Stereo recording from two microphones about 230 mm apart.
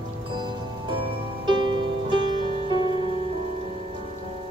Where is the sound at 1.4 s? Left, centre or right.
Centre.